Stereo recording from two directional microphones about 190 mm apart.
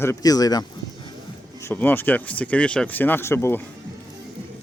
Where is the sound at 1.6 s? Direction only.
10° left (ahead or behind).